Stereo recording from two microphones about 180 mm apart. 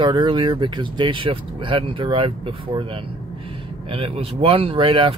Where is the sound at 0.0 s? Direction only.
25° right (ahead or behind).